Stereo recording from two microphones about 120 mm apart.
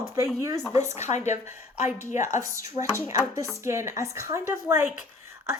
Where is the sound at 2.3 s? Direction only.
25° right (ahead or behind).